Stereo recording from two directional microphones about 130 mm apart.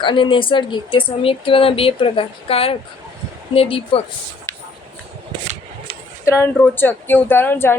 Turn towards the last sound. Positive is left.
turn(degrees=15)  # may be behind; listen again after turning